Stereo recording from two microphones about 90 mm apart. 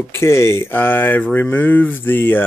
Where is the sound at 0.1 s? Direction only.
30° left (ahead or behind).